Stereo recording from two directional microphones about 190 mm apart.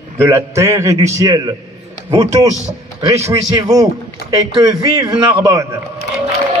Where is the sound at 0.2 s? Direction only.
15° right (ahead or behind).